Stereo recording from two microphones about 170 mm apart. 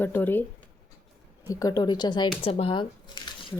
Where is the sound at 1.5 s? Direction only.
20° left (ahead or behind).